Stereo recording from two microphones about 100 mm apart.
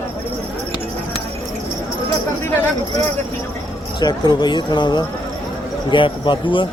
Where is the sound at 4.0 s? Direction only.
45° left (ahead or behind).